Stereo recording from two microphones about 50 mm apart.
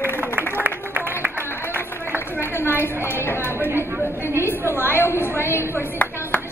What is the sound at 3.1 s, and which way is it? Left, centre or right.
Speech, left.